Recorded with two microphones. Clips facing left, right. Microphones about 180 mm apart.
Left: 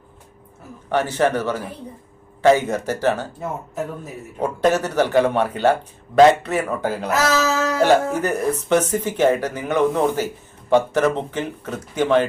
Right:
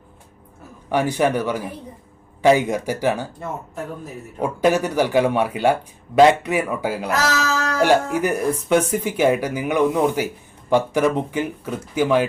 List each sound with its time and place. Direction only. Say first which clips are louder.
0.9 s speech: even; 10° right (ahead or behind)
4.4 s speech: even; 10° right (ahead or behind)